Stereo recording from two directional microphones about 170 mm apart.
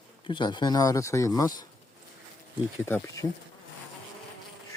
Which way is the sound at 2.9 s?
15° left (ahead or behind).